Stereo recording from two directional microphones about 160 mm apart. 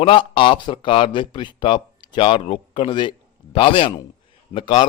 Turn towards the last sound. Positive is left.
turn(degrees=30)  # may be behind; listen again after turning